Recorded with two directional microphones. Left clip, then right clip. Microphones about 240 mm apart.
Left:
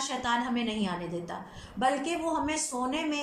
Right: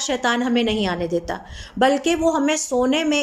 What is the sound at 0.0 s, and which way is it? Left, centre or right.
Speech, right.